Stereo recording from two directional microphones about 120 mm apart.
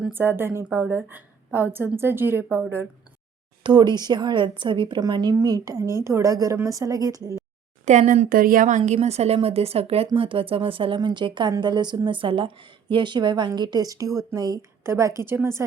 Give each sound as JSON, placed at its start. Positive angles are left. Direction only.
{"t": 0.1, "sound": "a woman's voice", "side_deg": -20}
{"t": 3.6, "sound": "a woman's voice", "side_deg": -35}
{"t": 7.9, "sound": "a woman's voice", "side_deg": -90}
{"t": 8.9, "sound": "a woman's voice", "side_deg": -65}